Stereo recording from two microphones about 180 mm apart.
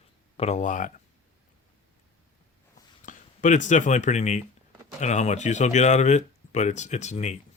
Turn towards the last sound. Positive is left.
turn(degrees=40)  # may be behind; listen again after turning